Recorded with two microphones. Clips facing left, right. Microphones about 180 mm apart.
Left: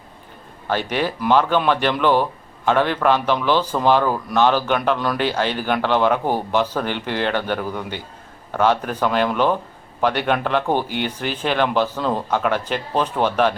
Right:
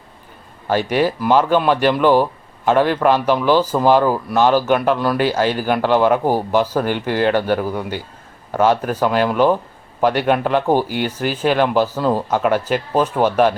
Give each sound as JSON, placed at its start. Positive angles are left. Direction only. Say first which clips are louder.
{"t": 0.7, "sound": "speech", "louder": "right 5 dB", "side_deg": -10}